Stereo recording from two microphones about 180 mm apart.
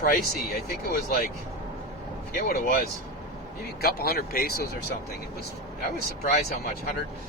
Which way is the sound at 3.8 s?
55° left (ahead or behind).